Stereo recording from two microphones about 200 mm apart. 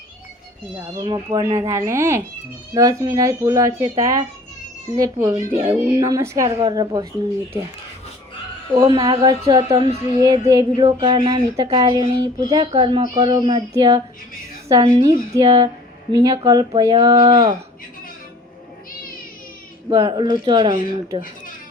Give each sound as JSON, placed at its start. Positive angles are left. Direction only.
{"t": 1.0, "sound": "speech", "side_deg": -20}
{"t": 8.8, "sound": "speech", "side_deg": -20}
{"t": 19.9, "sound": "speech", "side_deg": -25}